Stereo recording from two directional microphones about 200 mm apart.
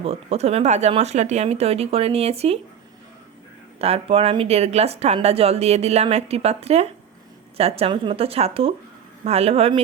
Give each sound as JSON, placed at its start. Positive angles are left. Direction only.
{"t": 0.0, "sound": "speech", "side_deg": -30}
{"t": 3.8, "sound": "speech", "side_deg": -30}